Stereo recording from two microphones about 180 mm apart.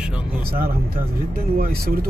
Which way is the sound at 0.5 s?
55° right (ahead or behind).